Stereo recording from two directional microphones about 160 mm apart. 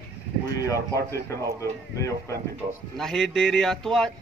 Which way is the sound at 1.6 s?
20° left (ahead or behind).